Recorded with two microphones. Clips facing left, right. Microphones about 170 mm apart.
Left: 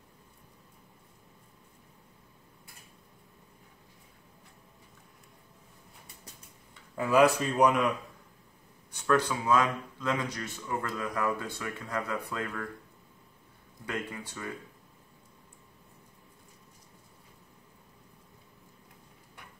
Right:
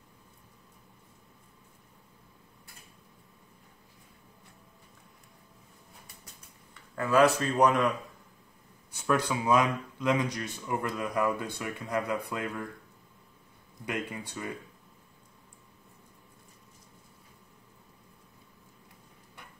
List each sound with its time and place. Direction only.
7.0 s speech: 15° left (ahead or behind)
9.0 s speech: 10° right (ahead or behind)
13.8 s speech: 15° right (ahead or behind)